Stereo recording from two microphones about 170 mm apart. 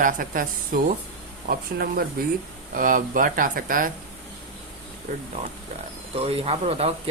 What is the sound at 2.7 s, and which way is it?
Speech, 55° right (ahead or behind).